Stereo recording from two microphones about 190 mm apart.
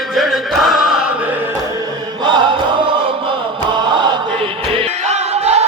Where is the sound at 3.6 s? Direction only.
25° right (ahead or behind).